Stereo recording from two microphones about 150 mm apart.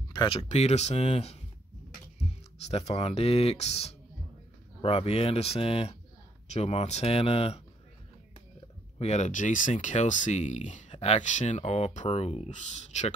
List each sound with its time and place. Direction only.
0.1 s speech: 30° left (ahead or behind)
0.5 s speech: 45° left (ahead or behind)
8.9 s speech: 45° left (ahead or behind)